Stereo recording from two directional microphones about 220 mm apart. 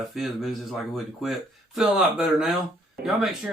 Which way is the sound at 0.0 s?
Centre (ahead or behind).